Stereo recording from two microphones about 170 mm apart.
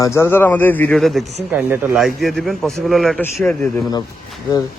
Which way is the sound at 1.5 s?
10° right (ahead or behind).